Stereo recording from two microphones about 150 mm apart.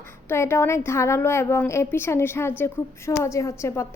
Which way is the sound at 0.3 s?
15° left (ahead or behind).